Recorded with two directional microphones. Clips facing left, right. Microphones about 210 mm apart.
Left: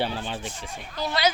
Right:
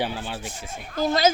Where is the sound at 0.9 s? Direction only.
45° right (ahead or behind).